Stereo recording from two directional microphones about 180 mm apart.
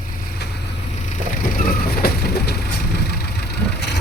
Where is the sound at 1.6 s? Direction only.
55° left (ahead or behind).